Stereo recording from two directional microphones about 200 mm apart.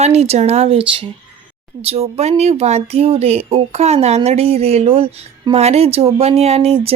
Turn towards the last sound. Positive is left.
turn(degrees=-30)  # may be behind; listen again after turning